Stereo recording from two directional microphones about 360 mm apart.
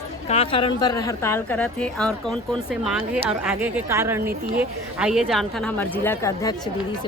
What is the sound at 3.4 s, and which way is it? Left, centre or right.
A woman's voice, centre.